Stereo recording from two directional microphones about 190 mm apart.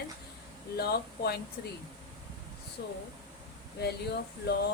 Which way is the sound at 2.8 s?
60° left (ahead or behind).